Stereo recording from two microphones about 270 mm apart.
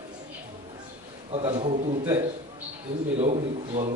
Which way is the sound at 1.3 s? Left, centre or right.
Centre.